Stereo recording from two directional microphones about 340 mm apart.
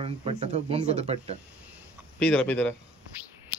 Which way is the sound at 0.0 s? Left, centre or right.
Centre.